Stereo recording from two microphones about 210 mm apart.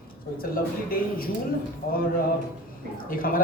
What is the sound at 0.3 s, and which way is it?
Speech, 45° left (ahead or behind).